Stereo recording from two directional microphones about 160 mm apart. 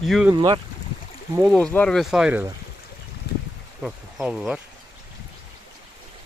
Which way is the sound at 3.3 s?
80° left.